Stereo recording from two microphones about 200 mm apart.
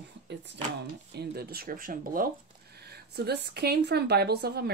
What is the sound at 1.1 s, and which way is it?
Speech, 55° right (ahead or behind).